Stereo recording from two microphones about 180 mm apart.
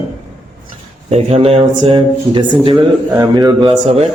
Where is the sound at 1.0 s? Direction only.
35° right (ahead or behind).